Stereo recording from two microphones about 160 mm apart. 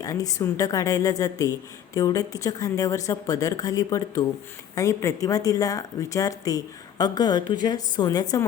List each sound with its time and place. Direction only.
0.0 s a woman's voice: 20° left (ahead or behind)